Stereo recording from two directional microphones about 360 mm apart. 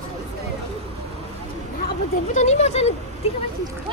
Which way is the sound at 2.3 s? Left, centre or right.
Centre.